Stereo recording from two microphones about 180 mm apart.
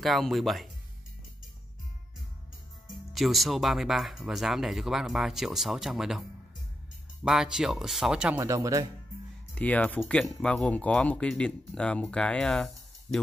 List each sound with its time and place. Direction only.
0.0 s speech: centre (ahead or behind)
3.1 s speech: centre (ahead or behind)
7.2 s speech: 5° right (ahead or behind)
8.4 s speech: 15° right (ahead or behind)
9.6 s speech: 10° left (ahead or behind)